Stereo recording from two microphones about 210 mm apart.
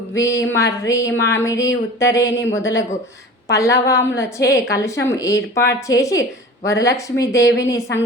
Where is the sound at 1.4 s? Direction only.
15° left (ahead or behind).